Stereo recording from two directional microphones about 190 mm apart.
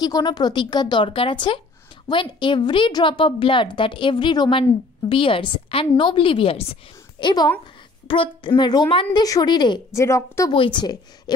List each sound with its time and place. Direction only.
0.0 s a woman's voice: 20° left (ahead or behind)
10.5 s a woman's voice: 25° left (ahead or behind)